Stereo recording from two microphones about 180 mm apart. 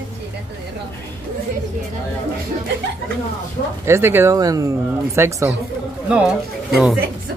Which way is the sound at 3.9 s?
15° right (ahead or behind).